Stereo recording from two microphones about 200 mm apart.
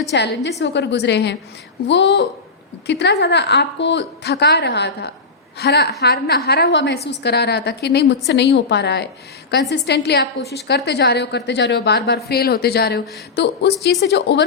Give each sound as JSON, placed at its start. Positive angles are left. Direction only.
{"t": 0.1, "sound": "a woman's voice", "side_deg": 60}